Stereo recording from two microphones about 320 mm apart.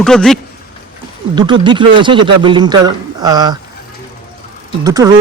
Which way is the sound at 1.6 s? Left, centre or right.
Centre.